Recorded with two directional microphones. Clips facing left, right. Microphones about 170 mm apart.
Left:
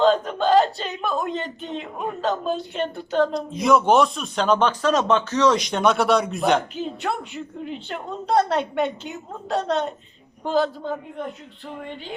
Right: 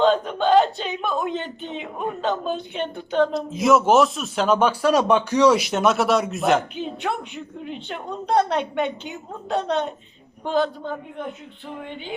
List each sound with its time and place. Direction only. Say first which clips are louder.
0.0 s speech: even; centre (ahead or behind)